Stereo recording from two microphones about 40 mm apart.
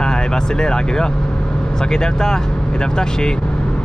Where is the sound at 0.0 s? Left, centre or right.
Centre.